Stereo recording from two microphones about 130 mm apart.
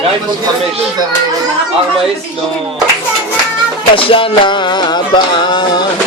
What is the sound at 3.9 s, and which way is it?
Music, 45° left (ahead or behind).